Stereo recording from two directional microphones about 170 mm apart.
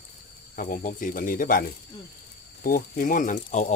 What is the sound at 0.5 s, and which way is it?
Speech, 50° left (ahead or behind).